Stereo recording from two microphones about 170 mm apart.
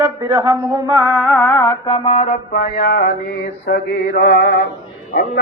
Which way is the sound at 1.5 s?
20° left (ahead or behind).